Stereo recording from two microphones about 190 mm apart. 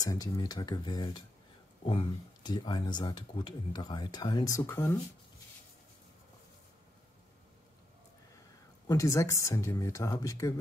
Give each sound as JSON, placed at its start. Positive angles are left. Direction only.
{"t": 0.0, "sound": "speech", "side_deg": 20}
{"t": 8.8, "sound": "speech", "side_deg": 15}